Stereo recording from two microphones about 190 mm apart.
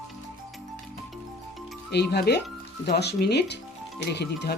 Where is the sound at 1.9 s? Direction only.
60° left (ahead or behind).